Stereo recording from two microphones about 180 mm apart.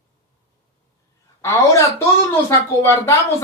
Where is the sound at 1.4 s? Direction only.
15° left (ahead or behind).